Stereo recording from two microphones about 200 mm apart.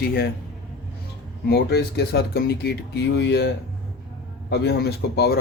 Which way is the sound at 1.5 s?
55° left (ahead or behind).